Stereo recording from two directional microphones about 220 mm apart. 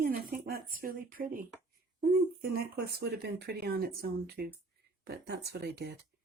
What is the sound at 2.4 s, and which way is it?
Speech, 45° right (ahead or behind).